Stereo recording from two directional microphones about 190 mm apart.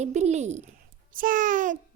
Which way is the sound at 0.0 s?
35° right (ahead or behind).